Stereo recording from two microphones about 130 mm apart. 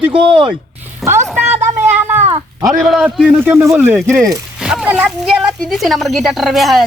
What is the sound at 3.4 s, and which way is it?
Speech, 20° right (ahead or behind).